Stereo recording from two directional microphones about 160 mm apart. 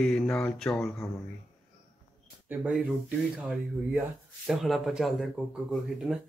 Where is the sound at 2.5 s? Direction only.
10° right (ahead or behind).